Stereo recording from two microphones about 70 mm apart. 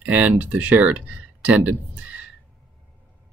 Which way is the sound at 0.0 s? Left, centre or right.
Right.